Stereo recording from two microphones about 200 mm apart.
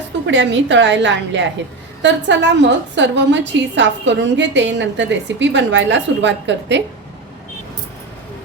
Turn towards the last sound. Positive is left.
turn(degrees=-60)  # may be behind; listen again after turning